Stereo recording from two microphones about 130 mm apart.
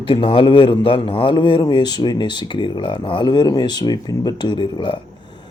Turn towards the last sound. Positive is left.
turn(degrees=35)  # may be behind; listen again after turning